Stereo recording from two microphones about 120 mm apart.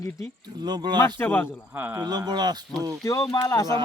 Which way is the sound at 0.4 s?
35° right (ahead or behind).